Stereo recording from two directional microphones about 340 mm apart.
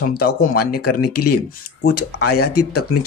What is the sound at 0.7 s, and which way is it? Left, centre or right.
Speech, left.